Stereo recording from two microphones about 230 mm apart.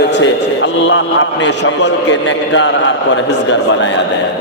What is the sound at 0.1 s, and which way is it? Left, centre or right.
A man's voice, left.